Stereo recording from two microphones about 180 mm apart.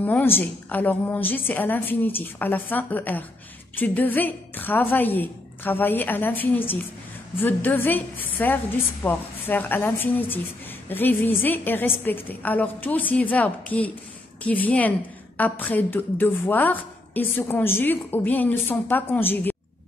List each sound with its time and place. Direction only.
0.0 s a woman's voice: 10° left (ahead or behind)